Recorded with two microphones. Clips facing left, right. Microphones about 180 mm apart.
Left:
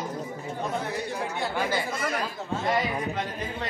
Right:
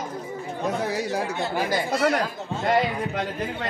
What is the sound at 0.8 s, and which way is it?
Chatter, 90° right.